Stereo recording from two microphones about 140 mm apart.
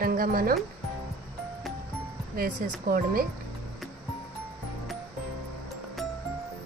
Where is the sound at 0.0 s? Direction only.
90° right.